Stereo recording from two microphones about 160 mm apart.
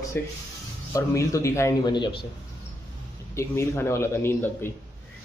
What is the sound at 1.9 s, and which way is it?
Speech, 30° left (ahead or behind).